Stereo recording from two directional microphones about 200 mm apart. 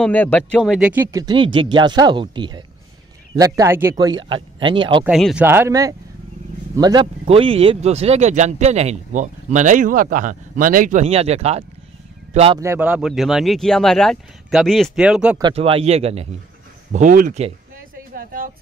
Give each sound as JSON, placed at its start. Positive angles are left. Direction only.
{"t": 0.0, "sound": "speech", "side_deg": 5}
{"t": 4.3, "sound": "speech", "side_deg": -25}
{"t": 5.0, "sound": "speech", "side_deg": -5}
{"t": 12.5, "sound": "speech", "side_deg": -10}
{"t": 15.5, "sound": "speech", "side_deg": -30}
{"t": 16.9, "sound": "speech", "side_deg": -40}
{"t": 18.1, "sound": "a sound", "side_deg": -45}